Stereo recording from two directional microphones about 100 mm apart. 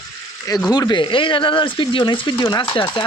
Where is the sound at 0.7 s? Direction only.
45° left (ahead or behind).